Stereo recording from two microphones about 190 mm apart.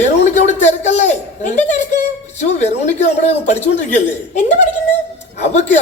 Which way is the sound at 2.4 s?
35° left (ahead or behind).